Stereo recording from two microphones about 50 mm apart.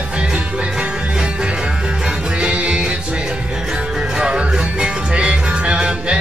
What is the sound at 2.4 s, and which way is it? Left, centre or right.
Music, right.